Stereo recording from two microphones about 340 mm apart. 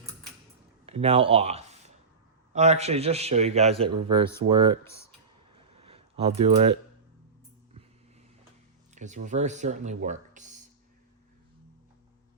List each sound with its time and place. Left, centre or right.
0.9 s a man's voice: centre
4.8 s speech: centre
5.5 s a sound: centre
9.0 s a man's voice: right